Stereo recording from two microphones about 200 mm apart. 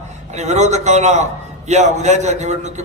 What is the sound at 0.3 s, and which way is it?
A man's voice, 35° right (ahead or behind).